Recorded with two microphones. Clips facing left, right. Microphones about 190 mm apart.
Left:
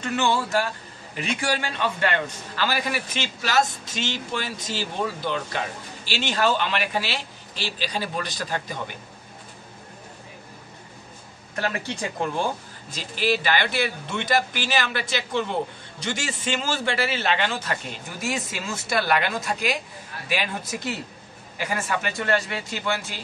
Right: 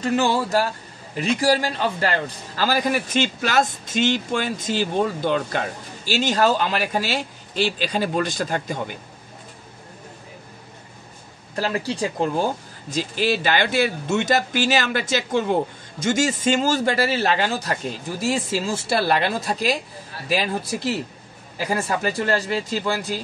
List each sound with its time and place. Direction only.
0.0 s a man's voice: 35° right (ahead or behind)
11.5 s speech: 35° right (ahead or behind)
12.9 s speech: 45° right (ahead or behind)